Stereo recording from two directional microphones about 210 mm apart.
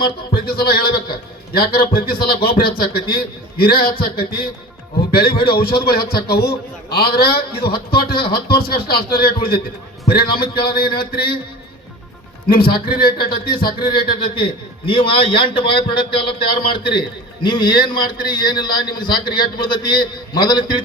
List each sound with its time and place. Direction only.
0.3 s a man's voice: 45° left (ahead or behind)
12.5 s a man's voice: 45° left (ahead or behind)
14.8 s a man's voice: 25° left (ahead or behind)